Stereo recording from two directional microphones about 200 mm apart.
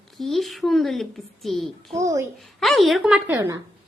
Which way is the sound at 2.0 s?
15° right (ahead or behind).